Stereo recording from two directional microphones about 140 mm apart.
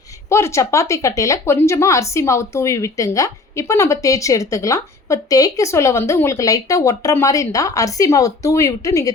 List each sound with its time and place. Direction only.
0.3 s speech: 20° left (ahead or behind)